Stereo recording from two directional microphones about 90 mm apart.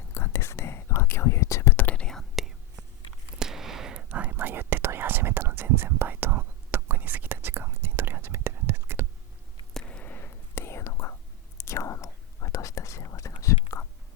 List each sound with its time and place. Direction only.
0.1 s whispering: 30° left (ahead or behind)
1.7 s whispering: 20° left (ahead or behind); by 9.0 s 25° right (ahead or behind)
9.7 s whispering: 15° left (ahead or behind); by 13.6 s 35° left (ahead or behind)